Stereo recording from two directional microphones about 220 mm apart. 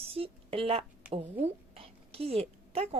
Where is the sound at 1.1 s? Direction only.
25° right (ahead or behind).